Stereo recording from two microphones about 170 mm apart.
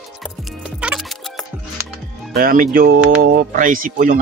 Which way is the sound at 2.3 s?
55° right (ahead or behind).